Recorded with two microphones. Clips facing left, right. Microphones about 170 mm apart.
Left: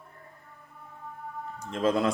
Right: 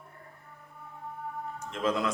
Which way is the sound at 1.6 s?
30° left (ahead or behind).